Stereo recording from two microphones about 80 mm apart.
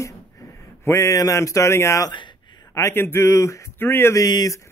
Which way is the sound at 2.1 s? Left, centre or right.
Left.